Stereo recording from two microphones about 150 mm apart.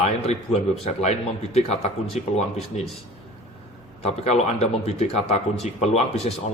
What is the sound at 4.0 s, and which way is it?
A man's voice, 45° left (ahead or behind).